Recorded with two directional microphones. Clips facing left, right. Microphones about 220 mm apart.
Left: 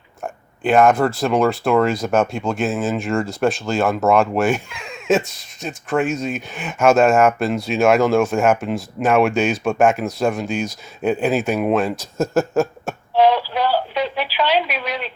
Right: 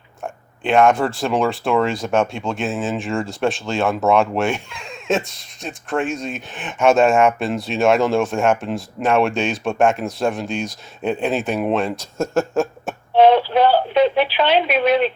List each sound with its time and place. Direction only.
0.2 s speech: centre (ahead or behind)
13.1 s radio: 25° right (ahead or behind)
13.6 s radio: 55° right (ahead or behind)
13.9 s a woman's voice: 25° right (ahead or behind)